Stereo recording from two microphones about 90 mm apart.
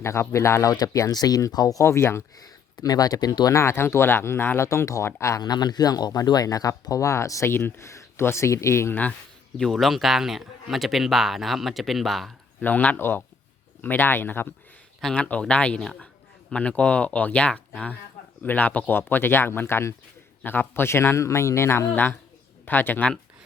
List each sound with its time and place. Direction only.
0.0 s speech: 30° left (ahead or behind)
2.4 s speech: 45° left (ahead or behind)
3.6 s speech: 30° left (ahead or behind)
5.4 s speech: 50° left (ahead or behind); by 9.0 s 30° left (ahead or behind)
9.6 s speech: centre (ahead or behind)
12.6 s speech: 20° left (ahead or behind)